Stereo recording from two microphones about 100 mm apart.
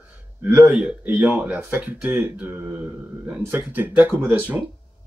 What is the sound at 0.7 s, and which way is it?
Speech, 10° right (ahead or behind).